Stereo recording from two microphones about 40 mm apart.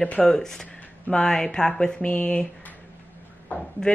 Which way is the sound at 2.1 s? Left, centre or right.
Left.